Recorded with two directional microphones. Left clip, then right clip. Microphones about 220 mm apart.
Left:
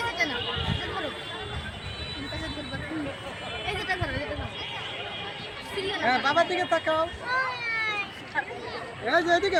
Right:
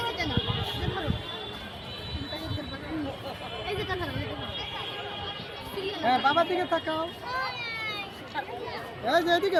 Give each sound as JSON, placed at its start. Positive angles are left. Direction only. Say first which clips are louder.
{"t": 3.8, "sound": "a sound", "louder": "left 3 dB", "side_deg": 45}
{"t": 6.0, "sound": "speech", "louder": "right 1 dB", "side_deg": 15}
{"t": 6.3, "sound": "speech", "louder": "left 2 dB", "side_deg": 35}
{"t": 9.0, "sound": "speech", "louder": "left 1 dB", "side_deg": -55}